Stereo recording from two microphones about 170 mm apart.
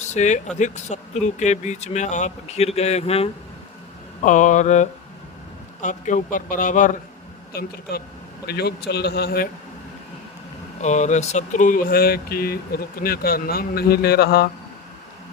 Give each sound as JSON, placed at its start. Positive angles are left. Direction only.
{"t": 0.1, "sound": "speech", "side_deg": 45}
{"t": 7.5, "sound": "a man's voice", "side_deg": 65}
{"t": 10.8, "sound": "speech", "side_deg": 45}